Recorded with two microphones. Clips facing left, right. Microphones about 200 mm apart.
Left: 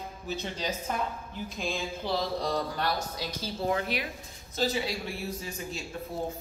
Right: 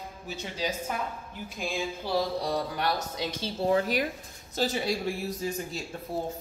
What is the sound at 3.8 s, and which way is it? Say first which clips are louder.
Speech: right 5 dB; 40° right (ahead or behind).